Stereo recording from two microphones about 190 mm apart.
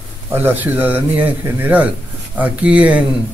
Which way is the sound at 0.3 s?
10° right (ahead or behind).